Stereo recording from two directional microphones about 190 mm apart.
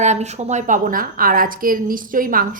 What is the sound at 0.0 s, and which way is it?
A woman's voice, 35° right (ahead or behind).